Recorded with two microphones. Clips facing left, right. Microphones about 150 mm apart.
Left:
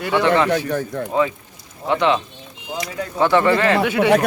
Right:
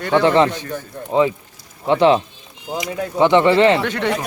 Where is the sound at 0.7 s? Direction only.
90° left.